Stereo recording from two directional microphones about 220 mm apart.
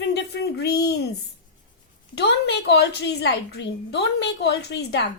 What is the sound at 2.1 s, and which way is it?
A woman's voice, 50° left (ahead or behind).